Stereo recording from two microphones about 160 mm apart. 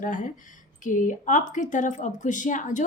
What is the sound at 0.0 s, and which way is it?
A woman's voice, 55° left (ahead or behind).